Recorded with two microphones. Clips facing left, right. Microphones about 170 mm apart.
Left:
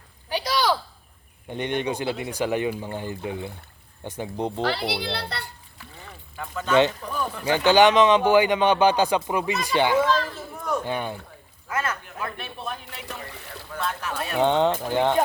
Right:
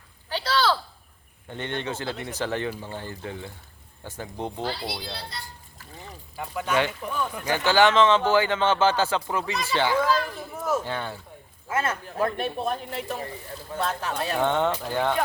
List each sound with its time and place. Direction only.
0.3 s a sound: 15° left (ahead or behind)
1.5 s speech: 15° left (ahead or behind)
4.6 s speech: 70° left (ahead or behind)
6.3 s speech: 15° right (ahead or behind)
7.4 s speech: 15° left (ahead or behind)
10.1 s a sound: 10° right (ahead or behind)
10.8 s speech: 15° left (ahead or behind)
11.7 s speech: 30° right (ahead or behind)
13.2 s speech: 75° left (ahead or behind)
13.7 s speech: 30° right (ahead or behind)
14.4 s speech: 15° left (ahead or behind)